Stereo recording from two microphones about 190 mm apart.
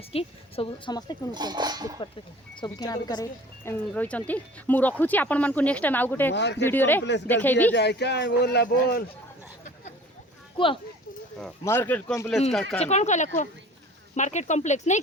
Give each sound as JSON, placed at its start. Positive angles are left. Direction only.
{"t": 0.1, "sound": "a woman's voice", "side_deg": 30}
{"t": 1.3, "sound": "speech", "side_deg": -20}
{"t": 2.6, "sound": "speech", "side_deg": 20}
{"t": 6.3, "sound": "speech", "side_deg": 65}
{"t": 6.7, "sound": "speech", "side_deg": 10}
{"t": 7.8, "sound": "speech", "side_deg": 60}
{"t": 11.6, "sound": "speech", "side_deg": 10}
{"t": 12.8, "sound": "speech", "side_deg": 35}